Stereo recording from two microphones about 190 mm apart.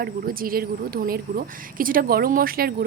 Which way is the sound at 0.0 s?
50° right (ahead or behind).